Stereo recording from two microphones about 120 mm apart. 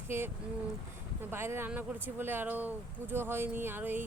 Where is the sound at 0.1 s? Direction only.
20° right (ahead or behind).